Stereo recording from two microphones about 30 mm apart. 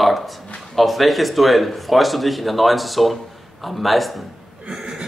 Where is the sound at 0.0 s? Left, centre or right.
Centre.